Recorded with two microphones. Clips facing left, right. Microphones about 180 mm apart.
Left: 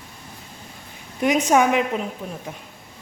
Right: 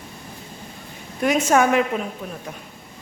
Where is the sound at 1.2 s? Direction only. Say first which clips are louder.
Even; 15° left (ahead or behind).